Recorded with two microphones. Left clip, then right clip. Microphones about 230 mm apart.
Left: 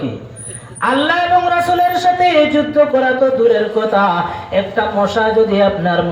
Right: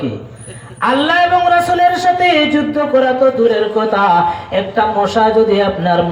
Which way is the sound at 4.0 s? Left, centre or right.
Right.